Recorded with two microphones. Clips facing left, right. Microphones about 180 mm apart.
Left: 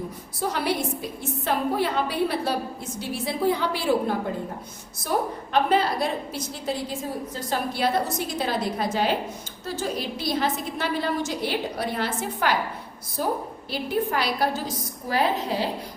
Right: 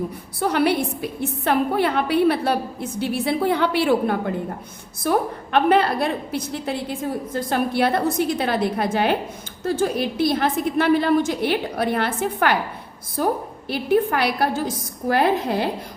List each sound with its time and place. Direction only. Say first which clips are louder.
0.3 s a woman's voice: right 6 dB; 65° right (ahead or behind)